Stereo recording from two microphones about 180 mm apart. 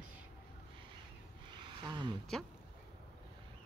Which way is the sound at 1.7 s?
25° right (ahead or behind).